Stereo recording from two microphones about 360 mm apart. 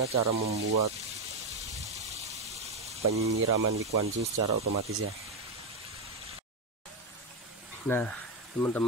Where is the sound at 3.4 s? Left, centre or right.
Right.